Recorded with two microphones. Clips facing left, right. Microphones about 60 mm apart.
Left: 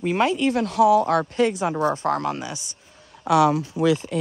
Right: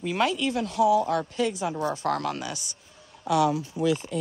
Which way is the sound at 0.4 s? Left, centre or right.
Left.